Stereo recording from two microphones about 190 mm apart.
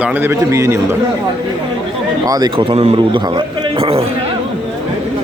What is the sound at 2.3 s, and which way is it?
A man's voice, 20° right (ahead or behind).